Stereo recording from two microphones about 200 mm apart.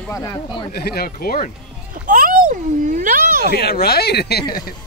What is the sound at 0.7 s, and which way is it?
Speech, 50° left (ahead or behind).